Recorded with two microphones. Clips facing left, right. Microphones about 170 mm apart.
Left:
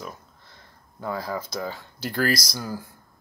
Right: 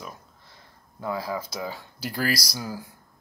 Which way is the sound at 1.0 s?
5° right (ahead or behind).